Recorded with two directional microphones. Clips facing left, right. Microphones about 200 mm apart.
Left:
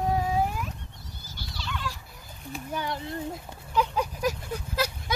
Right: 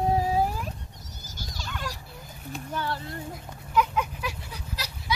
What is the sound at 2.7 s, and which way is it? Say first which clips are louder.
Speech: even; 15° left (ahead or behind).